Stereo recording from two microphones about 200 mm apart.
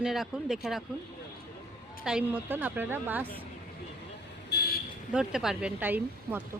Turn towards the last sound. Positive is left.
turn(degrees=-10)  # may be behind; listen again after turning